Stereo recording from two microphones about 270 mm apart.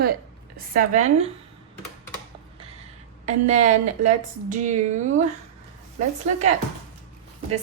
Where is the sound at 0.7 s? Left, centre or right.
Right.